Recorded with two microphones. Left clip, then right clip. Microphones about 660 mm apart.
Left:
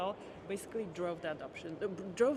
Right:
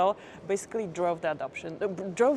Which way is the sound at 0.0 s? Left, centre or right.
Right.